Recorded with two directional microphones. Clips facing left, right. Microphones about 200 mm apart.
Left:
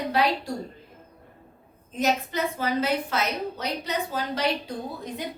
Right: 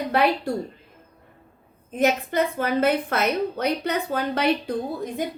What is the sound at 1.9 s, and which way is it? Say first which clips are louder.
A woman's voice: right 5 dB; 55° right (ahead or behind).